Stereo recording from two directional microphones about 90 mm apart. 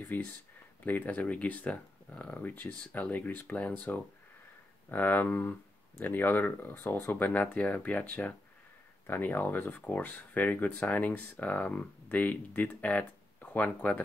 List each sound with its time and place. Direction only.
0.1 s speech: 20° left (ahead or behind)